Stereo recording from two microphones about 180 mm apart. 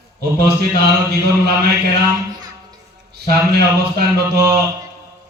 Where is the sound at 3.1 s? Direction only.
65° right (ahead or behind).